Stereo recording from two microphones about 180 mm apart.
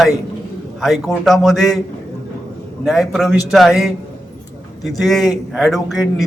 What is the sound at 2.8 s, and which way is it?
A man's voice, centre (ahead or behind).